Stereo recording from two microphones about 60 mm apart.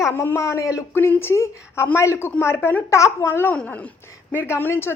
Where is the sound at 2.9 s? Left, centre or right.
Left.